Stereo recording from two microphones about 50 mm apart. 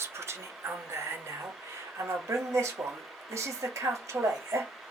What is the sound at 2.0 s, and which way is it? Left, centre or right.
Speech, right.